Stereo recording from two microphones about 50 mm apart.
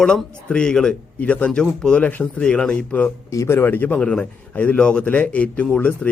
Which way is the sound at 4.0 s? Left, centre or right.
Left.